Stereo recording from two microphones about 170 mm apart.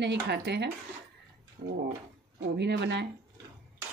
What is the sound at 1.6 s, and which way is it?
Speech, 50° right (ahead or behind).